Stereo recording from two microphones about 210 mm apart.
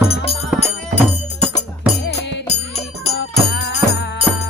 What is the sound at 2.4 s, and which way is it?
Music, 30° left (ahead or behind).